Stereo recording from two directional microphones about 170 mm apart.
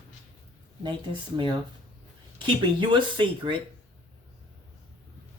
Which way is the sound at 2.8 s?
30° right (ahead or behind).